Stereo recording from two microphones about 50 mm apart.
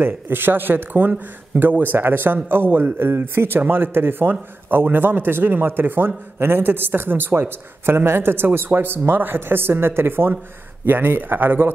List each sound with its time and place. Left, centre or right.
0.0 s speech: right